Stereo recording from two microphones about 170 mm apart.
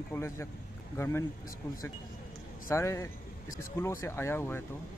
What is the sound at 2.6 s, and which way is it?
Speech, 15° left (ahead or behind).